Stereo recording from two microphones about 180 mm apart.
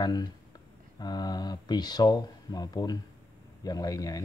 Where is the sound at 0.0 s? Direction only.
20° left (ahead or behind).